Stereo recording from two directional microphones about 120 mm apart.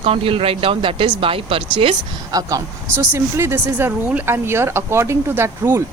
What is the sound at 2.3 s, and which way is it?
Speech, 30° right (ahead or behind).